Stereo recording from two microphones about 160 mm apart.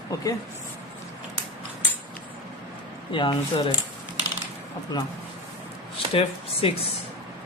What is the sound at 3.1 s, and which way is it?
Speech, 30° left (ahead or behind).